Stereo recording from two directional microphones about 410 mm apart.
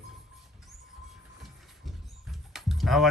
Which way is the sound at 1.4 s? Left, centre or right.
Centre.